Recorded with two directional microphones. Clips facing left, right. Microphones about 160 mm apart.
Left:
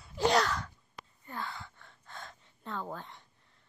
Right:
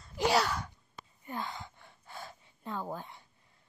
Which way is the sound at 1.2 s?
15° right (ahead or behind).